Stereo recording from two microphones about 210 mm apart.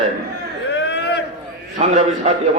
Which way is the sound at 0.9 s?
55° left (ahead or behind).